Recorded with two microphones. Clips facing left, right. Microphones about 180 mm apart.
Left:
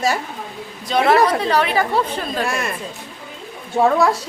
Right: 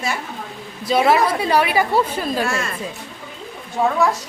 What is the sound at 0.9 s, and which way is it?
A woman's voice, 10° right (ahead or behind).